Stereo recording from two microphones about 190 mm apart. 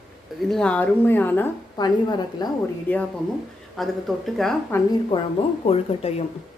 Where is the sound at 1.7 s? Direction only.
20° left (ahead or behind).